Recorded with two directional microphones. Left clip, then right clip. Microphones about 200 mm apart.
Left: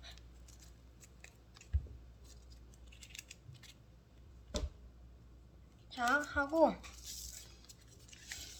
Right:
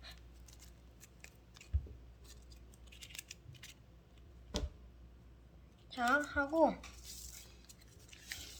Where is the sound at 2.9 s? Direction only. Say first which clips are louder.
Right 2 dB; 10° right (ahead or behind).